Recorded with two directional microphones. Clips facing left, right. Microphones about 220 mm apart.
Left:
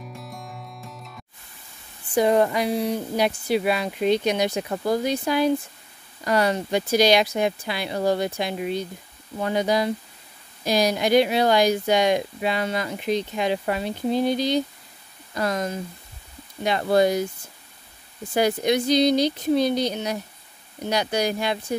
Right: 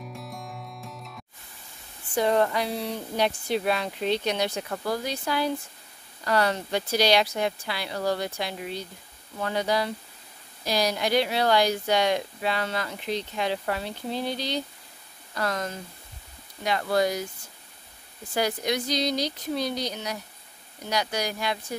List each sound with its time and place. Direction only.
0.0 s music: centre (ahead or behind)
2.1 s speech: 15° left (ahead or behind)
18.3 s speech: 20° left (ahead or behind)
19.9 s speech: 25° left (ahead or behind)